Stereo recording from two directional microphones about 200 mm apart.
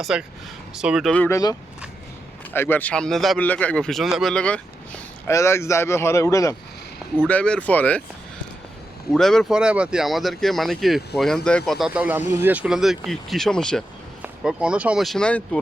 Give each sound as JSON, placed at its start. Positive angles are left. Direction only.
{"t": 0.0, "sound": "speech", "side_deg": -5}
{"t": 2.5, "sound": "speech", "side_deg": 10}
{"t": 9.1, "sound": "speech", "side_deg": 0}